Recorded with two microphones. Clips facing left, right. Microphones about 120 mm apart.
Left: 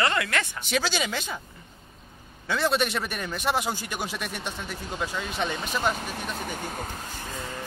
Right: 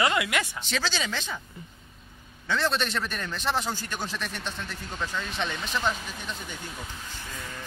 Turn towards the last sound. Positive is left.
turn(degrees=25)  # may be behind; listen again after turning